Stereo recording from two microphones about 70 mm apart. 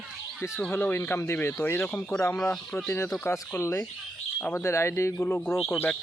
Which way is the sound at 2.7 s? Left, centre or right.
Left.